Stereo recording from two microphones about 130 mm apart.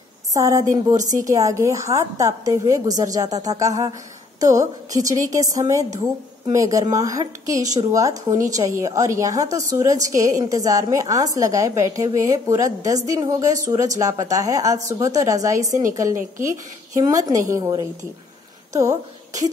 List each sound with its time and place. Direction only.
0.3 s a woman's voice: 25° right (ahead or behind)